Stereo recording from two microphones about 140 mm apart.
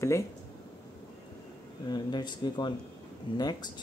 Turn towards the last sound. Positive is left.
turn(degrees=30)  # may be behind; listen again after turning